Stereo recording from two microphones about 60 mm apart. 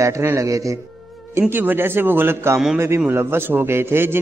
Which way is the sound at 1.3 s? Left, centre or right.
Right.